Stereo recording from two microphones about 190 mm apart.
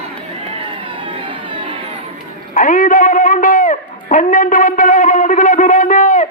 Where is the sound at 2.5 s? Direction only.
45° left (ahead or behind).